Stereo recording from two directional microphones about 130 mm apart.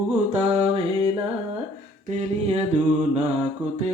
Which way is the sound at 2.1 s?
55° right (ahead or behind).